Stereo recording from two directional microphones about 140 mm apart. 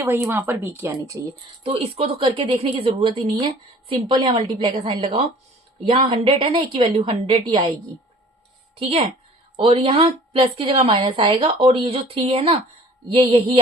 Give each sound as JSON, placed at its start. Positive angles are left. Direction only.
{"t": 0.0, "sound": "speech", "side_deg": -15}
{"t": 1.6, "sound": "a woman's voice", "side_deg": -40}
{"t": 8.7, "sound": "a woman's voice", "side_deg": -40}